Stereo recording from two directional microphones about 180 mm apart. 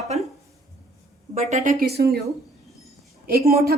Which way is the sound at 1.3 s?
40° right (ahead or behind).